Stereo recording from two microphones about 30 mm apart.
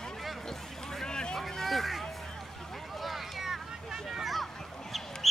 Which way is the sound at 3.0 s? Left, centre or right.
Centre.